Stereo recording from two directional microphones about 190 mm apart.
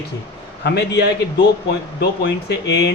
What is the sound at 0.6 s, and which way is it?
Speech, 60° left (ahead or behind).